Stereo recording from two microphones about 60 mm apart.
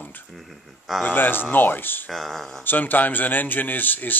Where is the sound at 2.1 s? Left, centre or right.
Centre.